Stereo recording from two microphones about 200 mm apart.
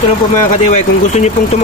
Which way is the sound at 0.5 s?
35° left (ahead or behind).